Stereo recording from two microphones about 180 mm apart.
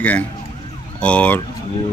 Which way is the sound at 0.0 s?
10° left (ahead or behind).